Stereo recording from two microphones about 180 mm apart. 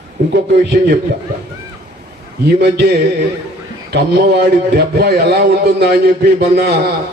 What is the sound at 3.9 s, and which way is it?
A man's voice, 65° right (ahead or behind).